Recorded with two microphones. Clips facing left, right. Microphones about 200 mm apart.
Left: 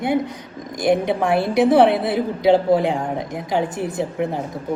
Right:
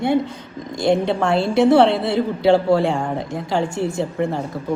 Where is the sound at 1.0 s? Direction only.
15° left (ahead or behind).